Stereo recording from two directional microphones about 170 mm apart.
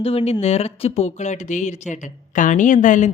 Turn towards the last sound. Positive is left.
turn(degrees=45)  # may be behind; listen again after turning